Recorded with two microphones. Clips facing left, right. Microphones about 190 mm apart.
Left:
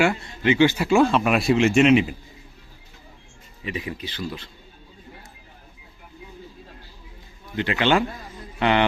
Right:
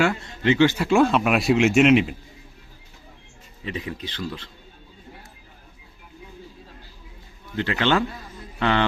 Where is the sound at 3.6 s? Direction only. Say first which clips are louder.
Even; 10° left (ahead or behind).